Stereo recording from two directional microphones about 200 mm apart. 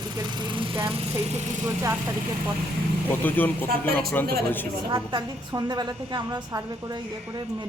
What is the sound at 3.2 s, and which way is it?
Speech, 10° left (ahead or behind).